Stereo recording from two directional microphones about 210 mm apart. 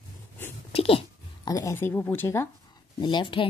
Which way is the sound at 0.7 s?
25° left (ahead or behind).